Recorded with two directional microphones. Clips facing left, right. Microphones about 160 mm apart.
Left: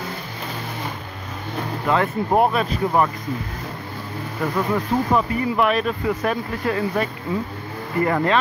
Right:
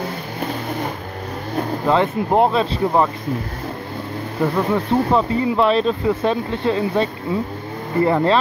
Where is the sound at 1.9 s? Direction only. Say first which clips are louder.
Right 2 dB; 30° right (ahead or behind).